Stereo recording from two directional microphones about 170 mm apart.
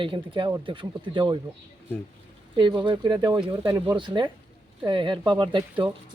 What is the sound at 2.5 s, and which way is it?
Speech, 30° right (ahead or behind).